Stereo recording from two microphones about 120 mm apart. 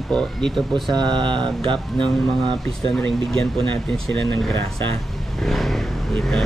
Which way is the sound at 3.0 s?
5° left (ahead or behind).